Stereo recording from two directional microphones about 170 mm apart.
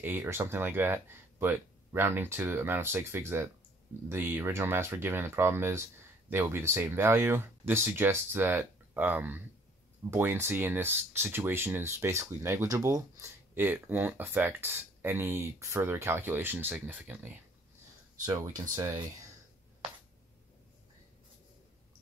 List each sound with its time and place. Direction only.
0.0 s speech: 10° right (ahead or behind)
18.2 s speech: 20° right (ahead or behind)